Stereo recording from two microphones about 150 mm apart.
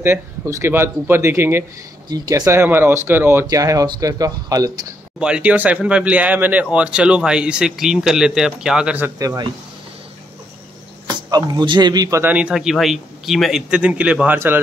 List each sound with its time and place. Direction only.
0.0 s speech: 15° right (ahead or behind)
2.0 s speech: 25° right (ahead or behind)
5.2 s speech: 5° right (ahead or behind)
9.2 s speech: 20° right (ahead or behind)
11.1 s speech: 25° right (ahead or behind)
12.2 s speech: 10° right (ahead or behind)